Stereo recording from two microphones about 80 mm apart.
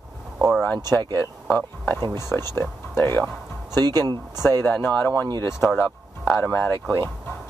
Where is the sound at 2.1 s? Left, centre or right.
Left.